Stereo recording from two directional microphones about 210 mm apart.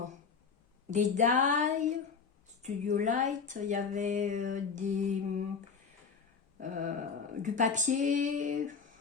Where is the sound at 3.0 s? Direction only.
35° right (ahead or behind).